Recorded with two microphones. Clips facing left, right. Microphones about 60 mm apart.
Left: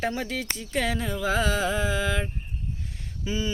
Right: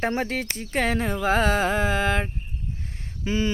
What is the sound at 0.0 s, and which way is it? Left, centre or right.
Speech, right.